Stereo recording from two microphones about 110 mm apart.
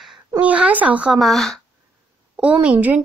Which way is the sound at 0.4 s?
15° right (ahead or behind).